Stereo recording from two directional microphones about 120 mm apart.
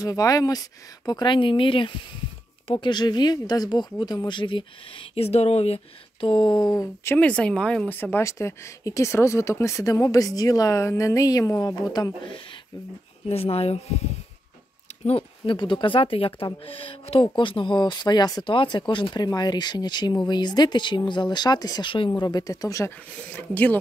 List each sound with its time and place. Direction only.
0.0 s speech: 30° left (ahead or behind); by 5.8 s 60° left (ahead or behind)
6.2 s speech: 40° left (ahead or behind)
7.2 s a woman's voice: 10° left (ahead or behind); by 12.4 s 35° left (ahead or behind)
13.3 s speech: 55° left (ahead or behind)
15.0 s speech: 50° left (ahead or behind)
22.2 s a woman's voice: 30° left (ahead or behind)
23.3 s speech: 15° left (ahead or behind)